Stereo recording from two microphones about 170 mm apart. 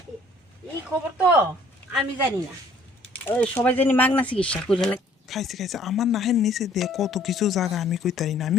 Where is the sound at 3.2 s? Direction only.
10° left (ahead or behind).